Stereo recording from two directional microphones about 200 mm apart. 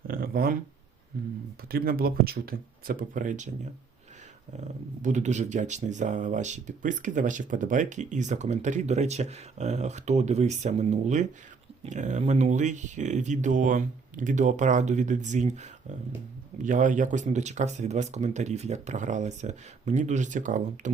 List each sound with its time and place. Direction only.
0.1 s speech: 45° right (ahead or behind)
1.7 s speech: 50° right (ahead or behind)
5.0 s speech: 35° right (ahead or behind)